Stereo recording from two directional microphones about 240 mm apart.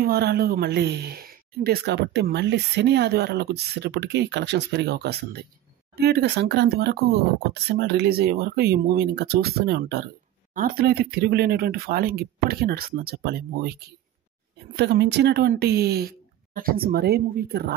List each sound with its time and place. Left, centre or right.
0.0 s speech: right